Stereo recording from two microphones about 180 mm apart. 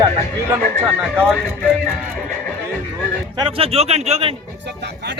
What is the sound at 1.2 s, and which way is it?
Speech, 5° left (ahead or behind).